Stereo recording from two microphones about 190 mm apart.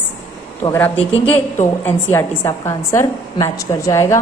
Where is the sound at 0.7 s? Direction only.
10° left (ahead or behind).